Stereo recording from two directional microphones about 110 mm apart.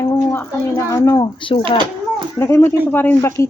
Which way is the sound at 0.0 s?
30° left (ahead or behind).